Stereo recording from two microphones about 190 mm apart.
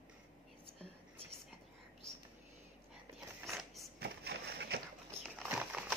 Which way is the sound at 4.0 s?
65° right (ahead or behind).